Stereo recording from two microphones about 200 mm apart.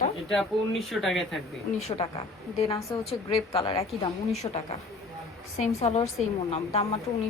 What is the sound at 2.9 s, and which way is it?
A woman's voice, 20° left (ahead or behind).